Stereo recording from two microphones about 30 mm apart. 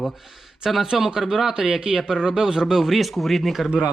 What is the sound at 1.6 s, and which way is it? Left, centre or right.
Speech, right.